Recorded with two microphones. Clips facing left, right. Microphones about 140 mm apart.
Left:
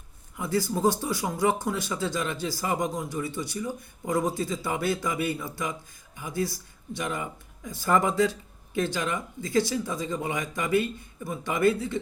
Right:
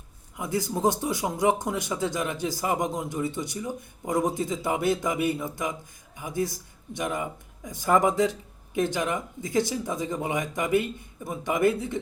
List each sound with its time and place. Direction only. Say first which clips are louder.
0.3 s speech: left 1 dB; 20° right (ahead or behind)